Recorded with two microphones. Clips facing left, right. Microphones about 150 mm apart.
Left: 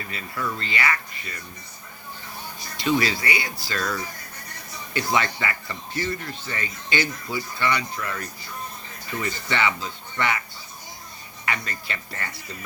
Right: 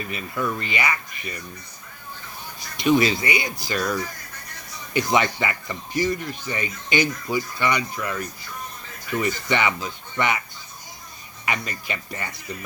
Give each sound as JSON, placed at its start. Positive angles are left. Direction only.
{"t": 0.0, "sound": "speech", "side_deg": -20}
{"t": 2.7, "sound": "speech", "side_deg": -20}
{"t": 4.9, "sound": "speech", "side_deg": -20}
{"t": 11.4, "sound": "speech", "side_deg": -15}